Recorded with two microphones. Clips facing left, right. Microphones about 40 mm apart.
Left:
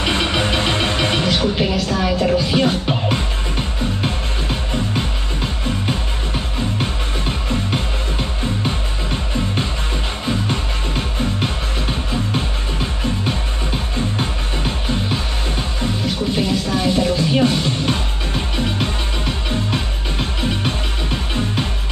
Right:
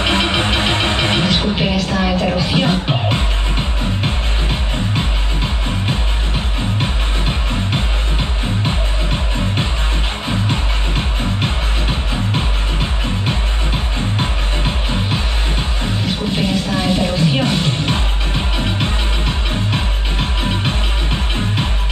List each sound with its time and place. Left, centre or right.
0.0 s music: right
16.3 s music: right